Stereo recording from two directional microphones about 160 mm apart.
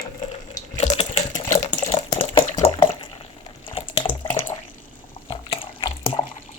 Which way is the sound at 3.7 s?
30° left (ahead or behind).